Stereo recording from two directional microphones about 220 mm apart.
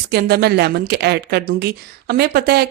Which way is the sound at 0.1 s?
45° right (ahead or behind).